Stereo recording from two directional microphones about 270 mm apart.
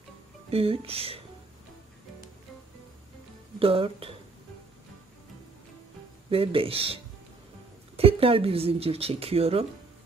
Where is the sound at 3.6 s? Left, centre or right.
Right.